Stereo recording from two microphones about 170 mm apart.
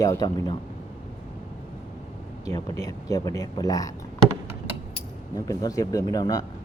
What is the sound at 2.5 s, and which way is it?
Speech, 20° left (ahead or behind).